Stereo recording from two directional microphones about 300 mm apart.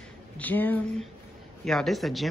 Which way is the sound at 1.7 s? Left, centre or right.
Centre.